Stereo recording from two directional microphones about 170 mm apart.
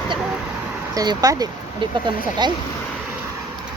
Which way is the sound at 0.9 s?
20° right (ahead or behind).